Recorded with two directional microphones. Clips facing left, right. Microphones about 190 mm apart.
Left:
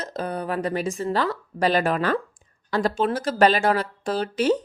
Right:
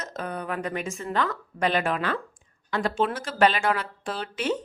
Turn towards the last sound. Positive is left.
turn(degrees=40)  # may be behind; listen again after turning